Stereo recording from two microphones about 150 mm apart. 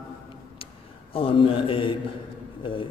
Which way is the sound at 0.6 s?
35° left (ahead or behind).